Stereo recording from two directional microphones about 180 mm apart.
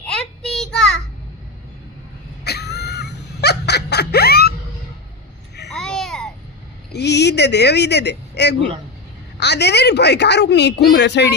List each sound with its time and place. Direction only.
0.0 s child singing: 5° left (ahead or behind)
2.4 s a sound: 65° left (ahead or behind)
5.7 s babbling: 5° left (ahead or behind)
6.9 s a man's voice: 70° left (ahead or behind)